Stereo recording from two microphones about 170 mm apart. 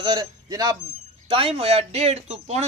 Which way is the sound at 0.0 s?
25° right (ahead or behind).